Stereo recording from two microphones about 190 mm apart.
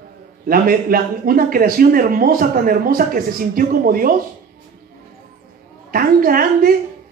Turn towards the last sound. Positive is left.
turn(degrees=-50)  # may be behind; listen again after turning